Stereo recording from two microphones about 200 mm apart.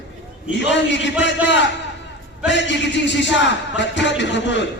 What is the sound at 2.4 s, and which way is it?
A man's voice, 65° left (ahead or behind).